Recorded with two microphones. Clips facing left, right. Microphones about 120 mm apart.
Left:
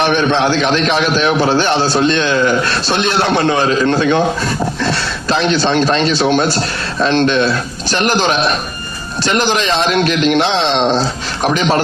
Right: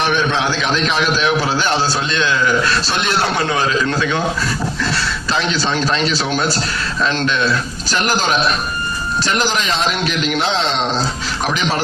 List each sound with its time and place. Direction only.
1.5 s a man's voice: 45° left (ahead or behind)
3.3 s a man's voice: 30° left (ahead or behind)